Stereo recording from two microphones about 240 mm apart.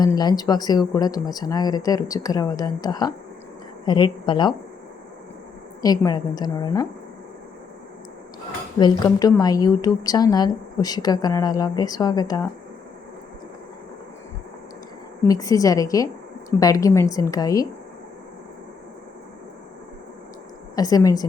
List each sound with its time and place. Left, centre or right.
0.0 s a woman's voice: centre
5.8 s a woman's voice: centre
8.8 s a woman's voice: centre
15.2 s a woman's voice: centre
20.7 s a woman's voice: centre